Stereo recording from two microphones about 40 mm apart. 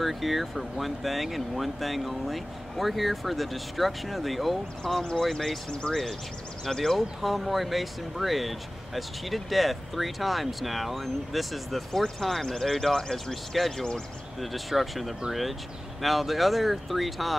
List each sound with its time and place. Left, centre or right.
0.0 s speech: centre
5.7 s speech: left
6.6 s speech: centre
7.0 s speech: centre